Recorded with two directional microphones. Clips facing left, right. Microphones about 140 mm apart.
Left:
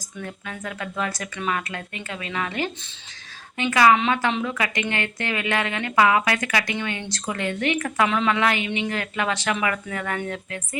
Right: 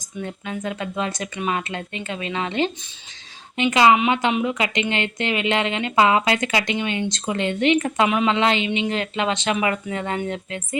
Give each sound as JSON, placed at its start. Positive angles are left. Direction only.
{"t": 0.2, "sound": "a woman's voice", "side_deg": -20}